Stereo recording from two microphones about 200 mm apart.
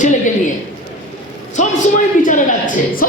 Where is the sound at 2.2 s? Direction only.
40° left (ahead or behind).